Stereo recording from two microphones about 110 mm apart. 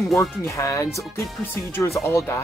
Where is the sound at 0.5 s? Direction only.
25° left (ahead or behind).